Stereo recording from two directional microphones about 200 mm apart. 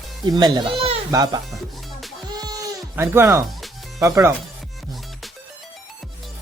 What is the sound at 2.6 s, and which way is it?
Music, 15° right (ahead or behind).